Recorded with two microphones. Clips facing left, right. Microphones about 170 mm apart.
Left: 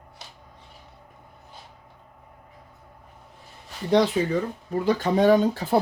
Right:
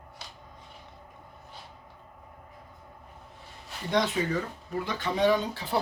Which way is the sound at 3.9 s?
30° left (ahead or behind).